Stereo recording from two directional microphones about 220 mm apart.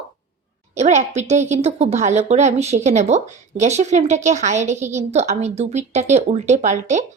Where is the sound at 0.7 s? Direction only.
30° right (ahead or behind).